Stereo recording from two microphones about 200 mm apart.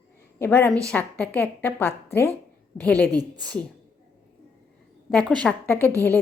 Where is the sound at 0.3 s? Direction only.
10° left (ahead or behind).